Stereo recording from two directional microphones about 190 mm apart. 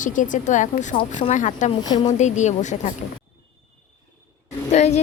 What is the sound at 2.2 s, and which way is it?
Speech, 40° left (ahead or behind).